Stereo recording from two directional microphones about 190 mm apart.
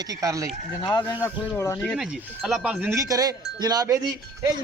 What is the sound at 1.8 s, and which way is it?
Speech, centre (ahead or behind).